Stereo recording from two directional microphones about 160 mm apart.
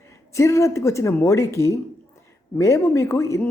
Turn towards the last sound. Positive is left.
turn(degrees=20)  # may be behind; listen again after turning